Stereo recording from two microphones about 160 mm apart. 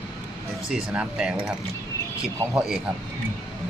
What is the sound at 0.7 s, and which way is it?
Speech, 5° right (ahead or behind).